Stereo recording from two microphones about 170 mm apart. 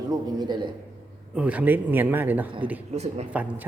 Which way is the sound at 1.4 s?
10° right (ahead or behind).